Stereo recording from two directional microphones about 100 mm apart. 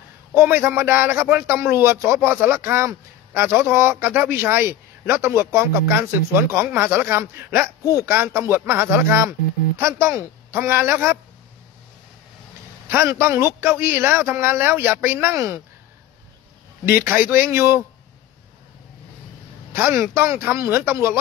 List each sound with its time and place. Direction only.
0.3 s speech: 20° right (ahead or behind)
12.9 s speech: 25° right (ahead or behind)
16.9 s speech: 20° right (ahead or behind)
19.7 s speech: 25° right (ahead or behind)